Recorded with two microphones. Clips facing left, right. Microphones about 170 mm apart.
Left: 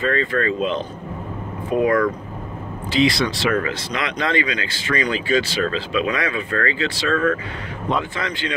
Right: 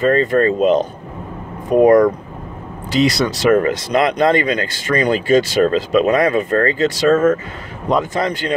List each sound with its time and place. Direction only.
0.0 s a man's voice: 40° right (ahead or behind)